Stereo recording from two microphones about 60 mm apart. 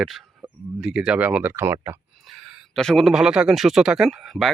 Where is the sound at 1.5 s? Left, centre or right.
Right.